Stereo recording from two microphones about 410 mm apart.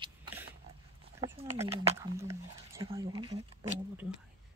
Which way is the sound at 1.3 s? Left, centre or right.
Centre.